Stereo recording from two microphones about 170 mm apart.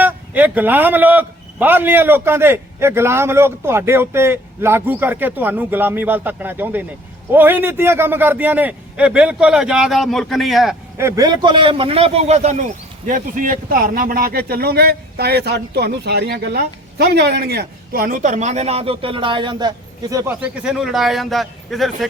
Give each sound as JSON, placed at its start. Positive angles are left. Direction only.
{"t": 0.0, "sound": "speech", "side_deg": -10}
{"t": 10.9, "sound": "a man's voice", "side_deg": -15}